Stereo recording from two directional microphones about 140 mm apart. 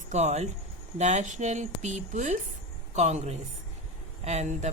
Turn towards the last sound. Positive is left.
turn(degrees=-55)  # may be behind; listen again after turning